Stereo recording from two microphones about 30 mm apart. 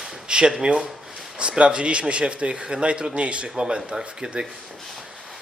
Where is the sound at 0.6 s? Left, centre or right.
Right.